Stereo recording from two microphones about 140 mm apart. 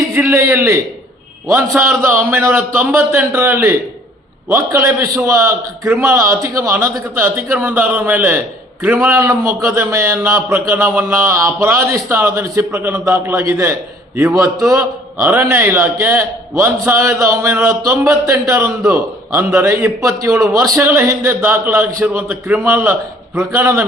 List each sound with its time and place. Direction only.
0.1 s a man's voice: 15° right (ahead or behind)
1.8 s a man's voice: 20° right (ahead or behind)